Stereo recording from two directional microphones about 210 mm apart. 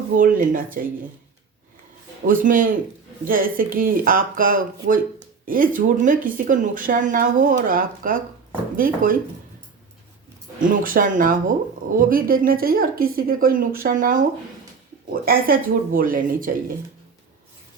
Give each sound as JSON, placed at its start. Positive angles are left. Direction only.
{"t": 0.2, "sound": "a woman's voice", "side_deg": -40}
{"t": 2.2, "sound": "a woman's voice", "side_deg": -40}
{"t": 10.6, "sound": "a woman's voice", "side_deg": -40}